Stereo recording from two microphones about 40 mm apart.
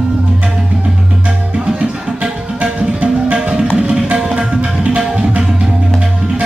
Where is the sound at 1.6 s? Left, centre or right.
Right.